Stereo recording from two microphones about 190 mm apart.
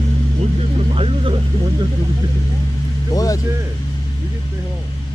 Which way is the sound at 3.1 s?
20° left (ahead or behind).